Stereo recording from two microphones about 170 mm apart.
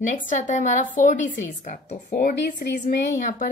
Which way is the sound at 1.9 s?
60° left (ahead or behind).